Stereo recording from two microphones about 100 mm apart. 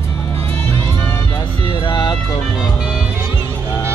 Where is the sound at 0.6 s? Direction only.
25° left (ahead or behind).